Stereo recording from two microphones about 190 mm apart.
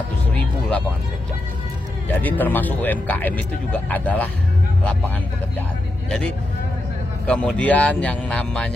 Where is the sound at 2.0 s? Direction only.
10° left (ahead or behind).